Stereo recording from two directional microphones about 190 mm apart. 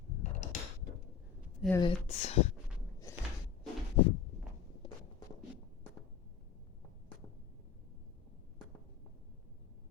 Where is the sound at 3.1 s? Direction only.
15° left (ahead or behind).